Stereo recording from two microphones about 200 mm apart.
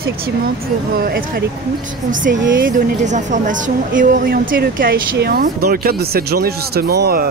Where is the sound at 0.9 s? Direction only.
45° right (ahead or behind).